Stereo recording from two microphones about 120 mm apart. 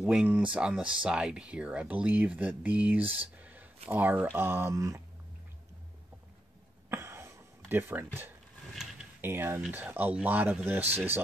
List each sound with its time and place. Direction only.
0.0 s speech: 10° right (ahead or behind); by 5.0 s 25° right (ahead or behind)
6.9 s a sound: 20° right (ahead or behind)
9.2 s speech: 20° right (ahead or behind)